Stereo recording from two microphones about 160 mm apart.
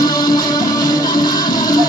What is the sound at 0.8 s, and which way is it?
Music, 60° left (ahead or behind).